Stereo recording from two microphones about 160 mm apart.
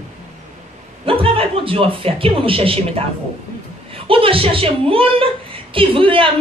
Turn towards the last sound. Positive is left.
turn(degrees=-35)  # may be behind; listen again after turning